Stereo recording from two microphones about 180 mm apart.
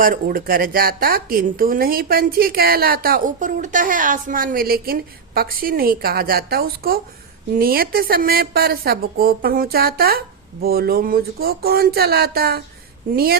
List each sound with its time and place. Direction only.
0.0 s speech: 50° right (ahead or behind)